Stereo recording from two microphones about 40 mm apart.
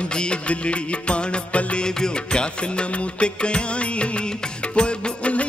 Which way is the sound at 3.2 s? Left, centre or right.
Left.